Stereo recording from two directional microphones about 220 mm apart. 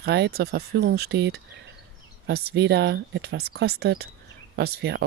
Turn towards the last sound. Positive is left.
turn(degrees=-50)  # may be behind; listen again after turning